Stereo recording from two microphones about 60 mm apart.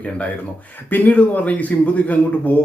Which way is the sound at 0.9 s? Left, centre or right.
Left.